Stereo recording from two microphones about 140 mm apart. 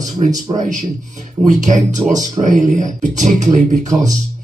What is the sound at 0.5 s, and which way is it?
Speech, 60° right (ahead or behind).